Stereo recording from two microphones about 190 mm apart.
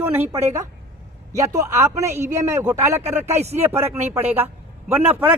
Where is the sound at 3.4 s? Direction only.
35° right (ahead or behind).